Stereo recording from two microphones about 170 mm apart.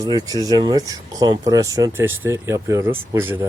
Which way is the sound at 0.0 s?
20° right (ahead or behind).